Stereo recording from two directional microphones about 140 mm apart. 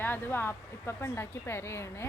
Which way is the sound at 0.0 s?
15° left (ahead or behind).